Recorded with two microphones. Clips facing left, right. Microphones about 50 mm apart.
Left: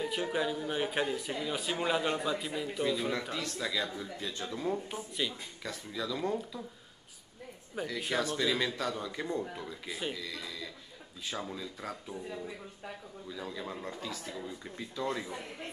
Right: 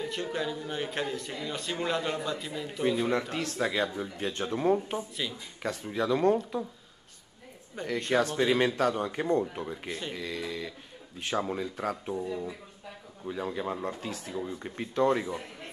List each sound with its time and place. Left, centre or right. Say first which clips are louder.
0.0 s speech: even; centre
2.8 s speech: right 6 dB; right
5.2 s speech: even; centre
5.6 s speech: right 8 dB; right
7.8 s speech: right 1 dB; centre
8.1 s speech: right 6 dB; right
13.3 s a man's voice: right 8 dB; right
14.5 s speech: right 7 dB; right